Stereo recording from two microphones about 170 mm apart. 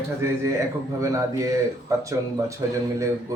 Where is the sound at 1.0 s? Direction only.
20° right (ahead or behind).